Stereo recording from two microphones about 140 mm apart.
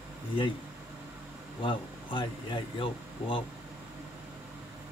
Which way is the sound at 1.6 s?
35° left (ahead or behind).